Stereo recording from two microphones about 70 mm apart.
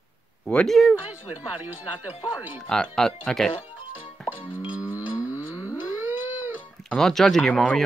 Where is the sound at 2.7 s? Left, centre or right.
Centre.